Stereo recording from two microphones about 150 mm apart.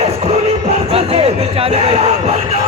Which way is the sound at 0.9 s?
40° right (ahead or behind).